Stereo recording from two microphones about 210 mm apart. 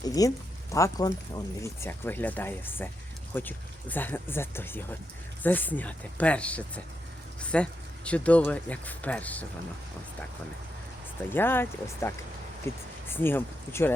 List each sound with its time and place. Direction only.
0.0 s speech: 15° left (ahead or behind)
11.3 s speech: 10° left (ahead or behind)